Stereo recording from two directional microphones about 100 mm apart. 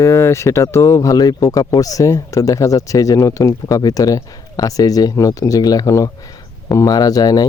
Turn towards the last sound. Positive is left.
turn(degrees=40)  # may be behind; listen again after turning